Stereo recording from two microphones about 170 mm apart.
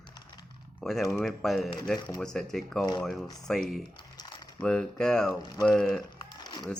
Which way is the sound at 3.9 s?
25° left (ahead or behind).